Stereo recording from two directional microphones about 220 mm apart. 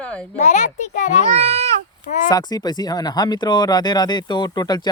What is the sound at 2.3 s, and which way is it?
Speech, 20° left (ahead or behind).